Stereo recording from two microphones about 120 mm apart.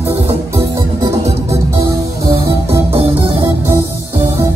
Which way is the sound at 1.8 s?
30° right (ahead or behind).